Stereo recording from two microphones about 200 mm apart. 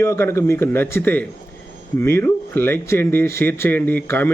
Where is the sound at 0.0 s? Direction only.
15° left (ahead or behind).